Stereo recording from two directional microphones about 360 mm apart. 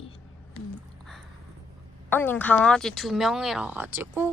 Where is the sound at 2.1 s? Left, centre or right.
Centre.